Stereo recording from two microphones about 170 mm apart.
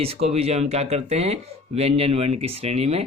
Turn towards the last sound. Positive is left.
turn(degrees=-40)  # may be behind; listen again after turning